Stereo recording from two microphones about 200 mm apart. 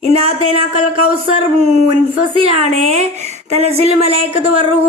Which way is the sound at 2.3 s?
30° right (ahead or behind).